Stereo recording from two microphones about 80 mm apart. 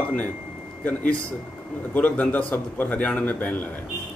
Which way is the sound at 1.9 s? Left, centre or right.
Centre.